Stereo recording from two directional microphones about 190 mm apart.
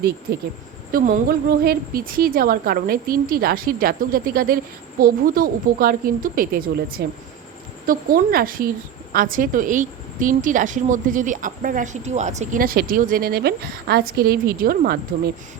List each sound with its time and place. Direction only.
0.9 s a woman's voice: 50° right (ahead or behind)